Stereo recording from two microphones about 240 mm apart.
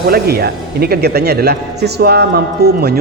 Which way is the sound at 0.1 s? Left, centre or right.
Right.